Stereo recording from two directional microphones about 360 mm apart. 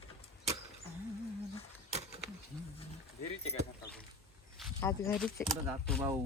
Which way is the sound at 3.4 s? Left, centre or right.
Left.